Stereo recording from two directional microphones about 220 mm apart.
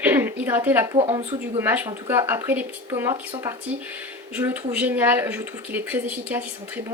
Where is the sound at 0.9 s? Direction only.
25° right (ahead or behind).